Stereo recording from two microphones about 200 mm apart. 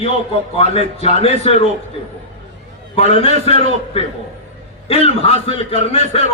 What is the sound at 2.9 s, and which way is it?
A man's voice, 30° left (ahead or behind).